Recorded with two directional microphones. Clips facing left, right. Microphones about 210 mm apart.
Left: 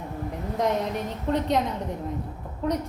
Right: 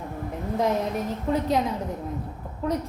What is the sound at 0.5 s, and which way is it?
A woman's voice, centre (ahead or behind).